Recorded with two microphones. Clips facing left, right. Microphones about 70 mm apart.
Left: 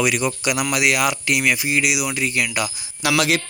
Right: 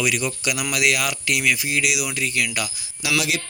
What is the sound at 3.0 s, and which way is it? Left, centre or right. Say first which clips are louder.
Speech: left 3 dB; left.